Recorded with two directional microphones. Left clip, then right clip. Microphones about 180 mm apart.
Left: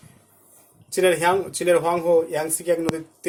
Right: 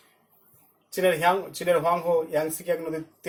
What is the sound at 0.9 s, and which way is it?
A man's voice, 60° left (ahead or behind).